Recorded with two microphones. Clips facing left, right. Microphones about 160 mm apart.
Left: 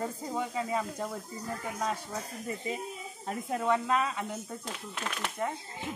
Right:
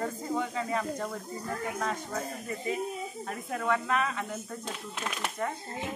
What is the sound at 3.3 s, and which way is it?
Speech, 25° left (ahead or behind).